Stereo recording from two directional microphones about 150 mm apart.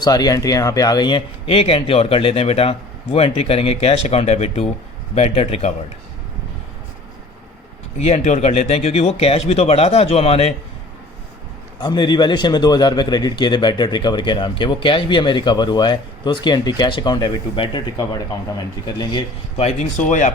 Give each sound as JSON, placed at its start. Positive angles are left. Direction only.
{"t": 0.0, "sound": "speech", "side_deg": 25}
{"t": 7.9, "sound": "speech", "side_deg": 45}
{"t": 11.8, "sound": "a man's voice", "side_deg": 30}
{"t": 20.1, "sound": "speech", "side_deg": 55}